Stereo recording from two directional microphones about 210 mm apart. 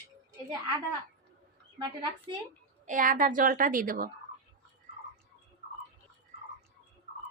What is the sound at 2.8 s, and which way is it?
A woman's voice, 40° right (ahead or behind).